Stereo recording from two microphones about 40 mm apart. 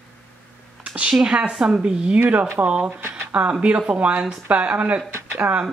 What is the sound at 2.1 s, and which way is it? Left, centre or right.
Speech, right.